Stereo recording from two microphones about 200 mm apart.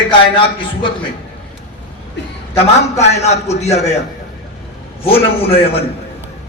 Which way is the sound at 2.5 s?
35° left (ahead or behind).